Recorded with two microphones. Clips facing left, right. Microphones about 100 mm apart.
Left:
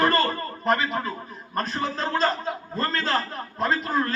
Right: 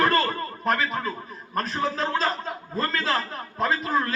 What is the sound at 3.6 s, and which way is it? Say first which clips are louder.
Speech: even; centre (ahead or behind).